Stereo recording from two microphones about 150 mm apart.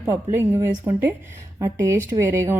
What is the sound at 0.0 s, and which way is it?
A woman's voice, 15° right (ahead or behind).